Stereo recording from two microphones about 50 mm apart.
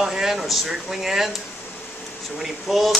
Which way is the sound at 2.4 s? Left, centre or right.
Centre.